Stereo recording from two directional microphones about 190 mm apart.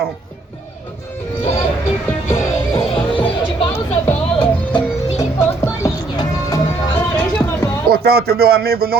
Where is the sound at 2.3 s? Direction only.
25° left (ahead or behind).